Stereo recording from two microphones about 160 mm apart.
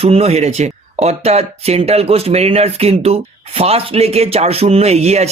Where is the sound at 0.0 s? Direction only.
40° right (ahead or behind).